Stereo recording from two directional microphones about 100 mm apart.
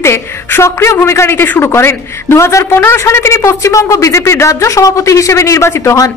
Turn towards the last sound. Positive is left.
turn(degrees=30)  # may be behind; listen again after turning